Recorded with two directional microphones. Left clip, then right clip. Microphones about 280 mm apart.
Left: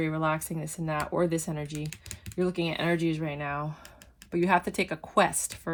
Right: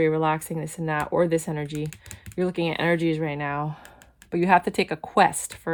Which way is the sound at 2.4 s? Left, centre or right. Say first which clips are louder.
Right 4 dB; right.